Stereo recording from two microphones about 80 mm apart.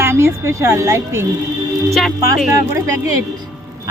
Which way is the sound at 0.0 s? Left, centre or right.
Right.